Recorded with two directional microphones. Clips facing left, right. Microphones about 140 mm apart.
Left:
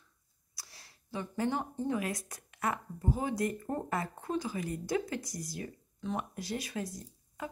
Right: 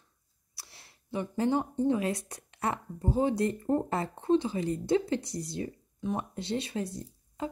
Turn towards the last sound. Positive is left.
turn(degrees=-25)  # may be behind; listen again after turning